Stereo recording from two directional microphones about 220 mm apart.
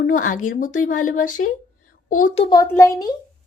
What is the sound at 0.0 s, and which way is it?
Speech, 35° left (ahead or behind).